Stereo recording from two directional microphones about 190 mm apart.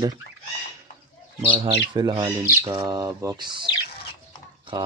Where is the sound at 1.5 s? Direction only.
25° right (ahead or behind).